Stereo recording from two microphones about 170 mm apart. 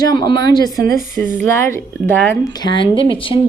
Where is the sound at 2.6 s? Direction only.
30° left (ahead or behind).